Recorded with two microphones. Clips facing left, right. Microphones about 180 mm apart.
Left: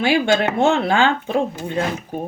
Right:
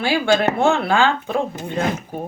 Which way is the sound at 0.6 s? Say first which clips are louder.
Even; 20° left (ahead or behind).